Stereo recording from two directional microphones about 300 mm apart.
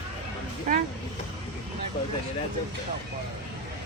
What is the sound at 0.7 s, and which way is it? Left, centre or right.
Speech, right.